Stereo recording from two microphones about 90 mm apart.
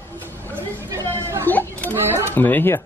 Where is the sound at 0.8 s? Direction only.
30° right (ahead or behind).